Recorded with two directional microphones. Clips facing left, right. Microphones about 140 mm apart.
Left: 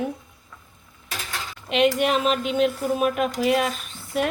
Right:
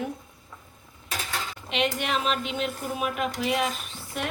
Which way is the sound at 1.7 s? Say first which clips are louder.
Left 7 dB; 50° left (ahead or behind).